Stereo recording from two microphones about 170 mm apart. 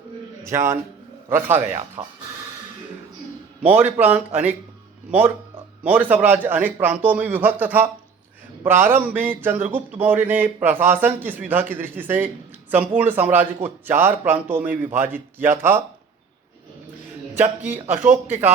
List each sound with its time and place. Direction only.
0.4 s speech: 15° right (ahead or behind)
2.0 s speech: 40° right (ahead or behind)
3.6 s speech: 10° right (ahead or behind)
5.8 s speech: 10° right (ahead or behind)
17.6 s speech: 10° right (ahead or behind)